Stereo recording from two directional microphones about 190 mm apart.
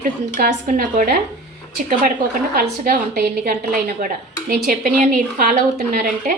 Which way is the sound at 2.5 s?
50° right (ahead or behind).